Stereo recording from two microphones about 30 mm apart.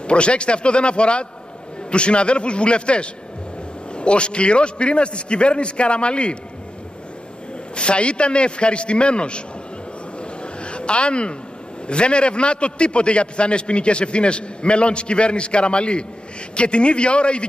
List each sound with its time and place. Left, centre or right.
0.0 s a man's voice: left
7.7 s a man's voice: left
10.4 s a sound: left
11.9 s a man's voice: left